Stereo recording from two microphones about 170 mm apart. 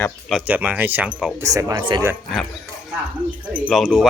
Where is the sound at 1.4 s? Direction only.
20° right (ahead or behind).